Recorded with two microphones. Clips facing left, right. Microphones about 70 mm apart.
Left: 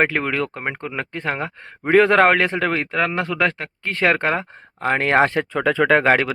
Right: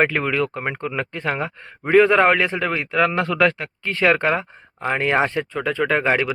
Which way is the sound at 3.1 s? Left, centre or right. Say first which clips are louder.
Right 2 dB; left.